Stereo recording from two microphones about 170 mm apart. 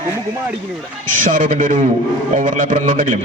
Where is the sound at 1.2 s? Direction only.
50° right (ahead or behind).